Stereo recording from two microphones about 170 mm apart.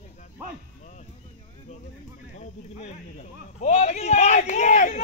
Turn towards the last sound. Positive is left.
turn(degrees=45)  # may be behind; listen again after turning